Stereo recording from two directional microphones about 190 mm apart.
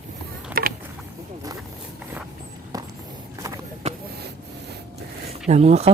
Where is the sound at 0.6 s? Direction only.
50° right (ahead or behind).